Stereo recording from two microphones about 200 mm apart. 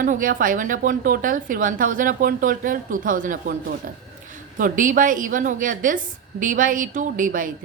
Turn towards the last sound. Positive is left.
turn(degrees=-40)  # may be behind; listen again after turning